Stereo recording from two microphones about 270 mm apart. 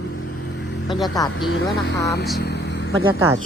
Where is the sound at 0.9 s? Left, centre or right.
Centre.